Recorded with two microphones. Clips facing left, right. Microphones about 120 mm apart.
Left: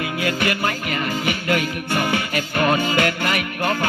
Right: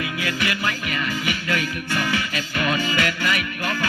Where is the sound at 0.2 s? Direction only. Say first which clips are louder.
Left 5 dB; 55° left (ahead or behind).